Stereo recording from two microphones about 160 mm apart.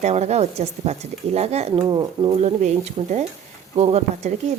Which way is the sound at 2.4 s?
45° right (ahead or behind).